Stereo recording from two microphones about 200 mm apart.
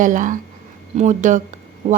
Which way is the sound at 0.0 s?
40° right (ahead or behind).